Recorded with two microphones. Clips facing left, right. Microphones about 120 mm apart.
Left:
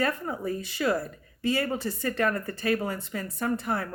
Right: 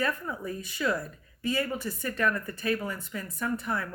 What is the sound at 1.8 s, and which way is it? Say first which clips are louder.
Speech: left 2 dB; 60° left (ahead or behind).